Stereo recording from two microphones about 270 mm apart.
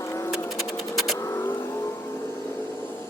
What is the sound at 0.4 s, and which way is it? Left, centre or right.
Music, centre.